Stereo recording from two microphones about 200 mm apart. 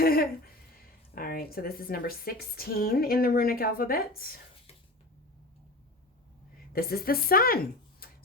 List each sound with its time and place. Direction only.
0.0 s a sound: 50° left (ahead or behind)
1.1 s a woman's voice: 45° left (ahead or behind)
6.7 s speech: 50° left (ahead or behind)